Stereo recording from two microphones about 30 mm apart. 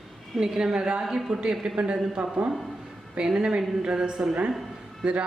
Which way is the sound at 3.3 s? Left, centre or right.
Right.